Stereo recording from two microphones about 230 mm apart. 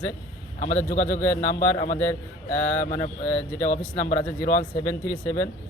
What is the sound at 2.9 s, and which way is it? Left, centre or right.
Speech, centre.